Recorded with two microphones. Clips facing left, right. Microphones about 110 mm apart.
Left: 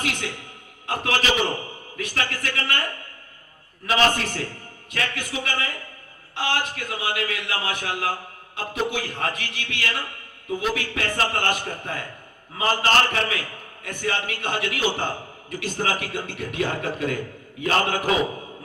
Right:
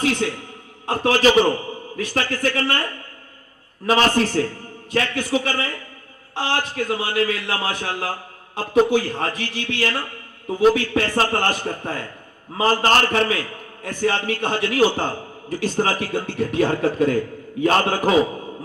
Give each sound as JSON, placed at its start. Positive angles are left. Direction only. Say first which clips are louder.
{"t": 0.0, "sound": "a man's voice", "louder": "right 8 dB", "side_deg": -35}
{"t": 3.8, "sound": "a man's voice", "louder": "right 4 dB", "side_deg": -35}
{"t": 12.5, "sound": "a man's voice", "louder": "right 3 dB", "side_deg": -35}